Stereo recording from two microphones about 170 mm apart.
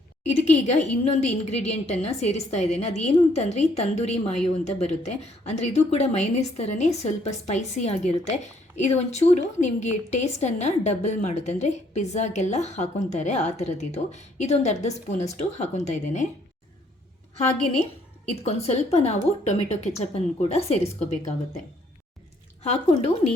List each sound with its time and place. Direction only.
0.3 s a woman's voice: 40° left (ahead or behind)
18.3 s a woman's voice: 40° left (ahead or behind)
22.6 s a woman's voice: 35° left (ahead or behind)